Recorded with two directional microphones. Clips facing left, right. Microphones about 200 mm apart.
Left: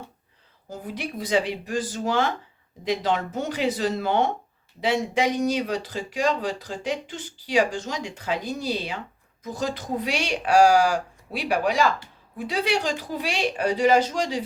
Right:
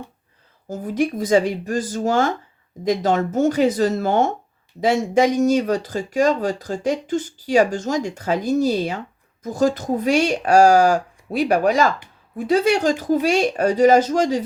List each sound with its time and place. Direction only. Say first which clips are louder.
0.7 s speech: right 11 dB; 45° right (ahead or behind)